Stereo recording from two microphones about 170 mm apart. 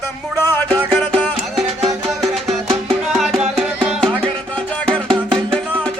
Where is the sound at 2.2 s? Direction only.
Centre (ahead or behind).